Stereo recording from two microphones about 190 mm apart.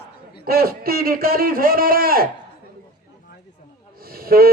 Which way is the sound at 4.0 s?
50° right (ahead or behind).